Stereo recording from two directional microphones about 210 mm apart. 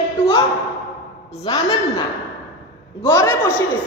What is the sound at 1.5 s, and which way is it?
Speech, 20° left (ahead or behind).